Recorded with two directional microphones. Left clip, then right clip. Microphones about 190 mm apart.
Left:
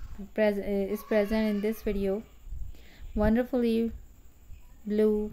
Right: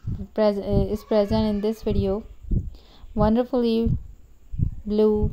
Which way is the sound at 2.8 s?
15° right (ahead or behind).